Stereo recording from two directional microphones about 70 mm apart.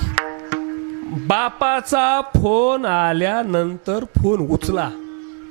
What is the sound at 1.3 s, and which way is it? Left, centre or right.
A man's voice, right.